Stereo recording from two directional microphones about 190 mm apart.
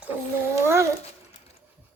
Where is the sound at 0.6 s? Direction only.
15° right (ahead or behind).